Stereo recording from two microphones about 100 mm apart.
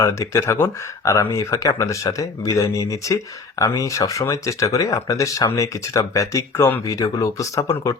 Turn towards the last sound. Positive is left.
turn(degrees=35)  # may be behind; listen again after turning